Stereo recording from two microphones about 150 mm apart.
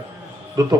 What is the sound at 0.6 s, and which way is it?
Speech, 25° right (ahead or behind).